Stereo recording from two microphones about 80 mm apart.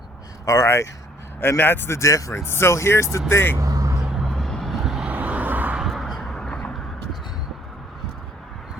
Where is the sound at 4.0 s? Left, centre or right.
Centre.